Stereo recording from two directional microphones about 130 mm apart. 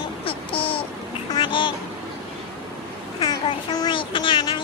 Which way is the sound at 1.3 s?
40° left (ahead or behind).